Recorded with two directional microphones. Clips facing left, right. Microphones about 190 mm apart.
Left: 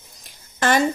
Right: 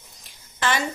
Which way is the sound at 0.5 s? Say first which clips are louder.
Left 6 dB; 45° left (ahead or behind).